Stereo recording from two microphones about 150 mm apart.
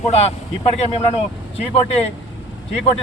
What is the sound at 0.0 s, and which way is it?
Speech, 45° left (ahead or behind).